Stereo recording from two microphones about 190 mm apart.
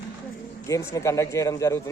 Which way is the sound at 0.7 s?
15° left (ahead or behind).